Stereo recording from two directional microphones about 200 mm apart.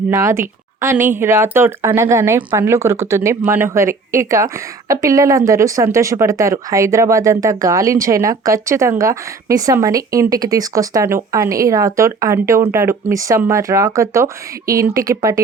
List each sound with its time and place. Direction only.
0.1 s speech: 15° right (ahead or behind)